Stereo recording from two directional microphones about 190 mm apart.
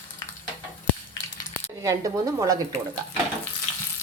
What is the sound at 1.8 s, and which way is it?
Speech, 15° right (ahead or behind).